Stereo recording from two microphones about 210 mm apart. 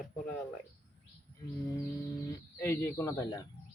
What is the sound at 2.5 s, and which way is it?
Mantra, 10° left (ahead or behind).